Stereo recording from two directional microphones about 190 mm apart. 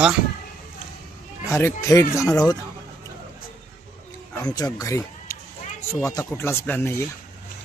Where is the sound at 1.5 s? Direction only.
15° left (ahead or behind).